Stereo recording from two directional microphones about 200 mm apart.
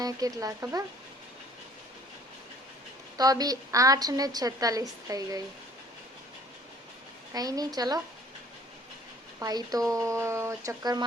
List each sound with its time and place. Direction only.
0.0 s a woman's voice: 20° right (ahead or behind)
3.2 s a woman's voice: 20° right (ahead or behind)
7.3 s a woman's voice: 20° right (ahead or behind)
9.4 s a woman's voice: 20° right (ahead or behind)